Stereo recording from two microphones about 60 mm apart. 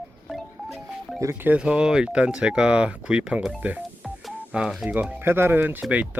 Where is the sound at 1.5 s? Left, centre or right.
Centre.